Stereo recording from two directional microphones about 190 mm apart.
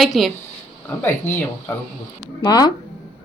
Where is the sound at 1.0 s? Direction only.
10° left (ahead or behind).